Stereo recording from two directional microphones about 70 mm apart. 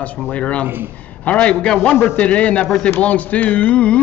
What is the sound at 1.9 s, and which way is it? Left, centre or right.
Speech, left.